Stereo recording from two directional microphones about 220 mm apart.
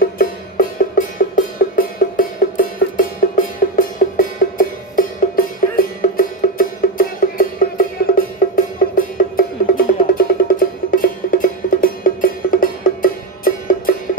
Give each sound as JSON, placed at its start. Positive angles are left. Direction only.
{"t": 0.2, "sound": "music", "side_deg": 40}